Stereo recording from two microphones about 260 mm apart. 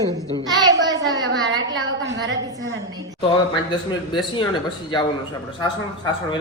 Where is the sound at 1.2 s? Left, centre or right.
Right.